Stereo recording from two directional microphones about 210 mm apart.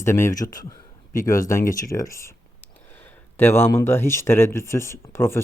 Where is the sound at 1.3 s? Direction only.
15° left (ahead or behind).